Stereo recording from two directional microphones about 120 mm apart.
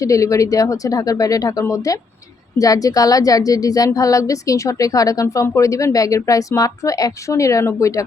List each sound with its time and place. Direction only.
0.0 s speech: 25° left (ahead or behind)